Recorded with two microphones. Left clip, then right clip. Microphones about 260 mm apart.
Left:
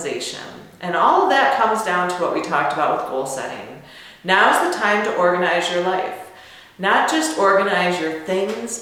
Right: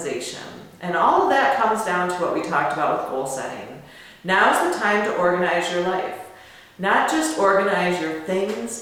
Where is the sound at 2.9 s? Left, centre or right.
Left.